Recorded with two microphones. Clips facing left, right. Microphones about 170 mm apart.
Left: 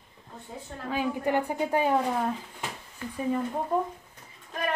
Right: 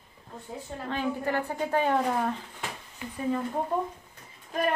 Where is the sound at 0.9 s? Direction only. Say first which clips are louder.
Left 2 dB; 15° left (ahead or behind).